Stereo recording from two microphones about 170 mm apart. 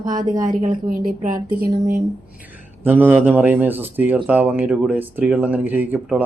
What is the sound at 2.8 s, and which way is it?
Speech, 10° right (ahead or behind).